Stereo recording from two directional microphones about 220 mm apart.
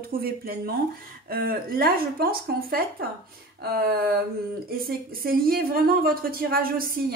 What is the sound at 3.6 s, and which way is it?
A woman's voice, 45° right (ahead or behind).